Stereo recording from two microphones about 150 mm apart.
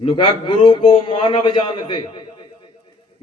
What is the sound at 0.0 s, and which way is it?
A man's voice, 35° left (ahead or behind).